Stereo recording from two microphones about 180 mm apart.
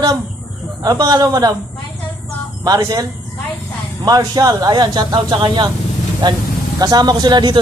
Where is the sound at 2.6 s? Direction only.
20° right (ahead or behind).